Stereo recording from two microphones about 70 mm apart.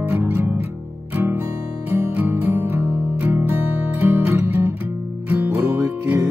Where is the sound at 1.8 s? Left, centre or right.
Right.